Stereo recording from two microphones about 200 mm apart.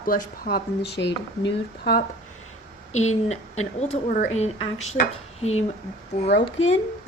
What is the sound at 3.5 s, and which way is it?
A woman's voice, 35° left (ahead or behind).